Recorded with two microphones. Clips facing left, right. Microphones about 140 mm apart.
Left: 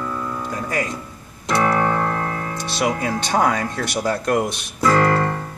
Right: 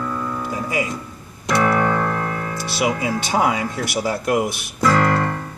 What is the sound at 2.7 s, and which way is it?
Speech, 5° right (ahead or behind).